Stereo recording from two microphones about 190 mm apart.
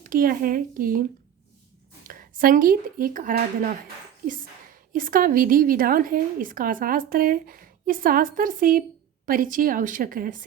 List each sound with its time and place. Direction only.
0.0 s a woman's voice: 45° right (ahead or behind)
2.0 s speech: 45° right (ahead or behind)
4.9 s a woman's voice: 45° right (ahead or behind)